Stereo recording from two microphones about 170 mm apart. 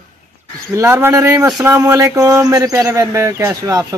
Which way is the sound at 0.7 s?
15° right (ahead or behind).